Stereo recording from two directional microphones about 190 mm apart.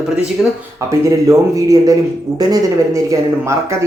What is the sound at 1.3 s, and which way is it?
Speech, 20° right (ahead or behind).